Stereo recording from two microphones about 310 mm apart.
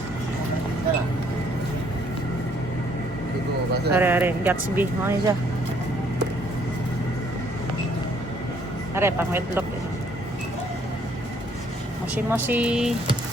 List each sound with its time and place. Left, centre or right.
3.9 s speech: centre
9.0 s speech: centre
12.1 s speech: centre